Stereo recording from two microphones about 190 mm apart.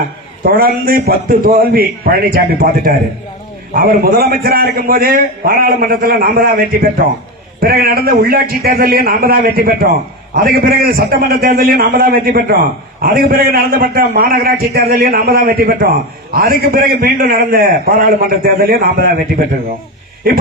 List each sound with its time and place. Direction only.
0.5 s a man's voice: 50° right (ahead or behind)